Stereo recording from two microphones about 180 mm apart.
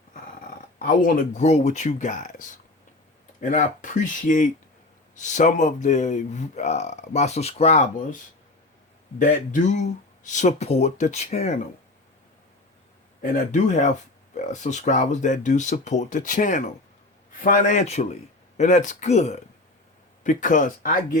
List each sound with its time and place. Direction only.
0.8 s a man's voice: 50° left (ahead or behind); by 7.9 s 35° left (ahead or behind)
9.1 s a man's voice: 45° left (ahead or behind)
13.3 s a man's voice: 40° left (ahead or behind)